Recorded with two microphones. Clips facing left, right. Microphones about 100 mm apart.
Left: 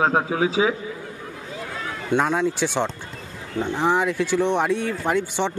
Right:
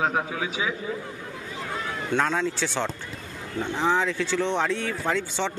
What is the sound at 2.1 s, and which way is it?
Speech, 15° left (ahead or behind).